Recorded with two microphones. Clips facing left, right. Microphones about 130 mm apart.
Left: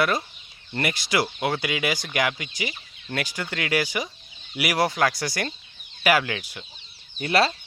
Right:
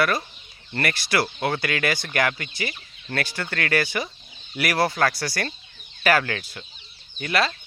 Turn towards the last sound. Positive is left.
turn(degrees=30)  # may be behind; listen again after turning